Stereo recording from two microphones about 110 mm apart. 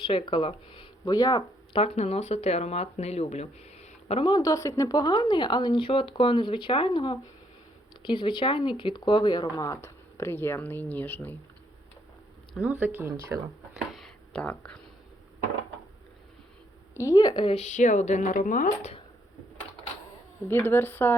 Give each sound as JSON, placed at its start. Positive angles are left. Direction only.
{"t": 0.0, "sound": "speech", "side_deg": 55}
{"t": 1.7, "sound": "speech", "side_deg": 65}
{"t": 4.2, "sound": "speech", "side_deg": 40}
{"t": 12.8, "sound": "speech", "side_deg": -15}
{"t": 13.1, "sound": "speech", "side_deg": -25}
{"t": 13.7, "sound": "a sound", "side_deg": 0}
{"t": 14.3, "sound": "speech", "side_deg": 10}
{"t": 16.9, "sound": "speech", "side_deg": 30}
{"t": 17.5, "sound": "a sound", "side_deg": 90}
{"t": 20.5, "sound": "speech", "side_deg": 20}